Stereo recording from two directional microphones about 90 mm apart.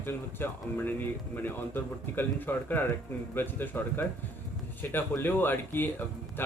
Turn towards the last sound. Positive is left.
turn(degrees=25)  # may be behind; listen again after turning